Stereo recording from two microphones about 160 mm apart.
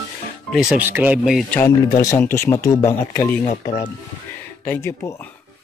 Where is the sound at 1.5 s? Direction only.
15° left (ahead or behind).